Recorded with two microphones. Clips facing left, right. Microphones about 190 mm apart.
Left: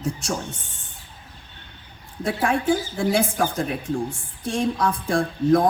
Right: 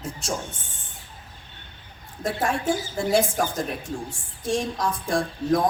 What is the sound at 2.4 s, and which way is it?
A woman's voice, 55° left (ahead or behind).